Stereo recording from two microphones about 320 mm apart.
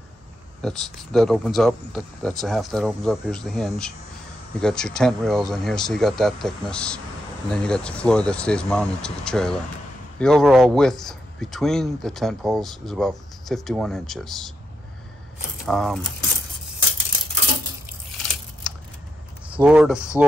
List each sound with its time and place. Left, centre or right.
0.6 s speech: centre
15.6 s speech: centre
19.5 s speech: centre